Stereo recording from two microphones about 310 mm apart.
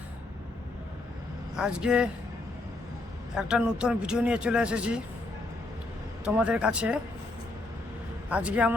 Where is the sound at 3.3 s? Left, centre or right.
Centre.